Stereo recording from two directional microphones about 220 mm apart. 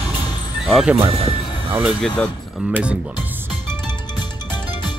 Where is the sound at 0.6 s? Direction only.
Centre (ahead or behind).